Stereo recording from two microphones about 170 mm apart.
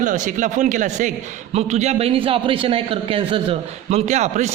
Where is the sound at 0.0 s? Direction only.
50° right (ahead or behind).